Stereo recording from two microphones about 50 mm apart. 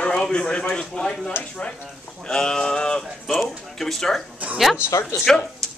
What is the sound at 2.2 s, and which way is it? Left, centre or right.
Speech, centre.